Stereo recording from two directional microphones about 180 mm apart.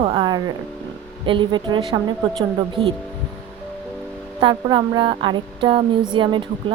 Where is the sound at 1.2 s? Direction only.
25° right (ahead or behind).